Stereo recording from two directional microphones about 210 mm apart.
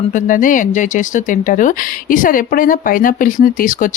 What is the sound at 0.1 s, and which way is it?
Speech, 40° left (ahead or behind).